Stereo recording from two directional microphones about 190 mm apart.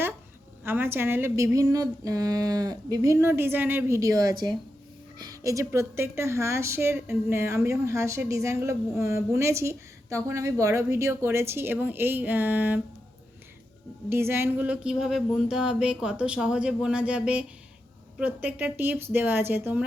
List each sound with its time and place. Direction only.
0.6 s a woman's voice: 10° right (ahead or behind)
14.1 s a woman's voice: 15° right (ahead or behind)